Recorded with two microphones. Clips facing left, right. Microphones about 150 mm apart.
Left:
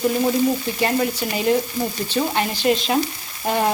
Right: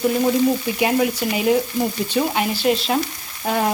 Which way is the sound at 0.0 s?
Centre (ahead or behind).